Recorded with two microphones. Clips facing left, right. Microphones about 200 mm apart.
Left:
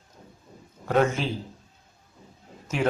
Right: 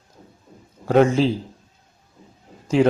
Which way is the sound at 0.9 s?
30° right (ahead or behind).